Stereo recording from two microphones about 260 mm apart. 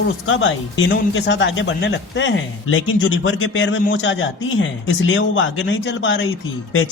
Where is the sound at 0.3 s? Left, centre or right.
Left.